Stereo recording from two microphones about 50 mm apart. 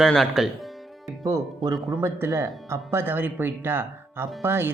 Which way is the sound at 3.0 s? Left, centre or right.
Right.